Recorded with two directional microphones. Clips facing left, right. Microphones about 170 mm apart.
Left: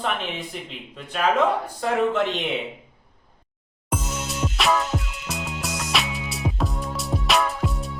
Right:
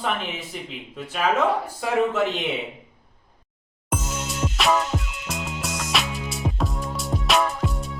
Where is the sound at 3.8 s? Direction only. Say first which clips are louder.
Even; centre (ahead or behind).